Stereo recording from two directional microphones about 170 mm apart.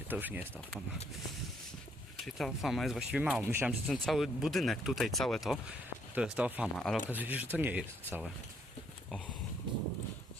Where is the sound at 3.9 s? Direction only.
Centre (ahead or behind).